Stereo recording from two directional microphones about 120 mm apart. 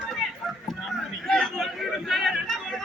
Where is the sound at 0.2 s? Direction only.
Centre (ahead or behind).